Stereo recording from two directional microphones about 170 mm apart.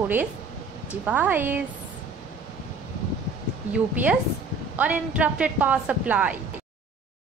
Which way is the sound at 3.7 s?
10° right (ahead or behind).